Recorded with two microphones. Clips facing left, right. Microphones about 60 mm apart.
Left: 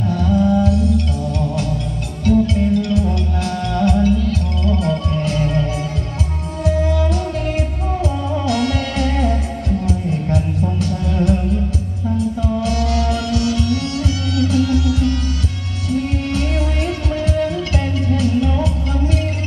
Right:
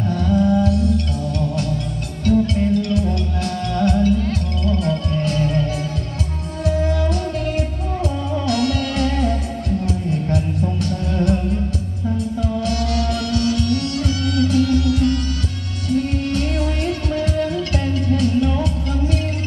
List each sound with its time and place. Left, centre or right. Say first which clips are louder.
0.2 s music: left 1 dB; centre
2.2 s music: left 2 dB; left
12.6 s music: left 2 dB; left